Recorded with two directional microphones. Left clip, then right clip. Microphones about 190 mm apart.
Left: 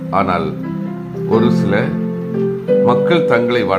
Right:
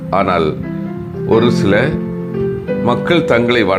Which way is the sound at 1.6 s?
25° right (ahead or behind).